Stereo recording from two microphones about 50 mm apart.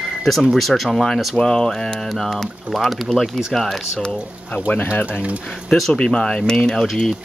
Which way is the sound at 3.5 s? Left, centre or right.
Centre.